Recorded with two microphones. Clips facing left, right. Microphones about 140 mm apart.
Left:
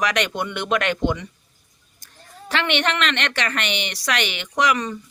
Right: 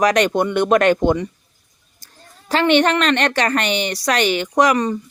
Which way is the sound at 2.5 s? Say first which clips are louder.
Right 8 dB; 40° right (ahead or behind).